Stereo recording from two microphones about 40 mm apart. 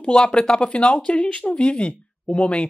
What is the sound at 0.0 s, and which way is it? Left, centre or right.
Speech, left.